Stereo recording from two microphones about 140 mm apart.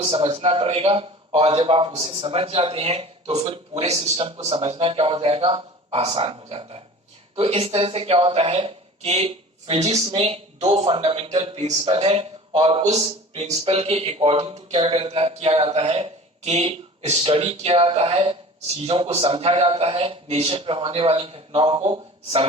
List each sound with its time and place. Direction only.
0.0 s speech: 45° right (ahead or behind)
21.8 s a man's voice: 35° right (ahead or behind)